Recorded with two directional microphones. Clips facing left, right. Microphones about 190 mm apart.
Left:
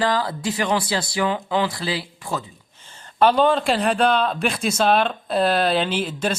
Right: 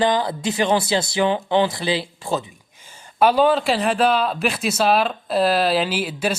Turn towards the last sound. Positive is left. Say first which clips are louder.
# even
turn(degrees=-10)  # may be behind; listen again after turning